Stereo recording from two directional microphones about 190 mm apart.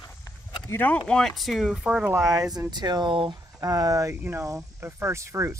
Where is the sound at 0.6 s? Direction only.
10° left (ahead or behind); by 5.5 s 15° right (ahead or behind).